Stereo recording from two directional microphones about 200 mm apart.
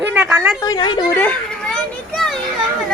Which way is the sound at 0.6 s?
20° left (ahead or behind).